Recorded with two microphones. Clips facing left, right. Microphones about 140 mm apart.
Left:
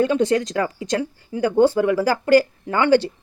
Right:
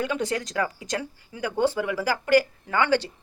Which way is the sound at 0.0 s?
25° left (ahead or behind).